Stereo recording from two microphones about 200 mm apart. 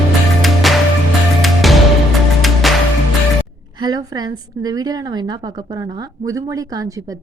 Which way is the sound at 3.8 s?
20° right (ahead or behind).